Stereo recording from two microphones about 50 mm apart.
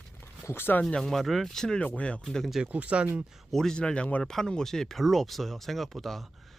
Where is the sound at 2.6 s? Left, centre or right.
Right.